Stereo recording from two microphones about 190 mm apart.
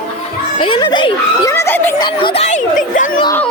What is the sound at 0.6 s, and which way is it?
Speech, 25° left (ahead or behind).